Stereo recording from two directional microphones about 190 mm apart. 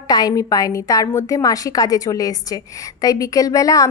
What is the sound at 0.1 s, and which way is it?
A woman's voice, 20° left (ahead or behind).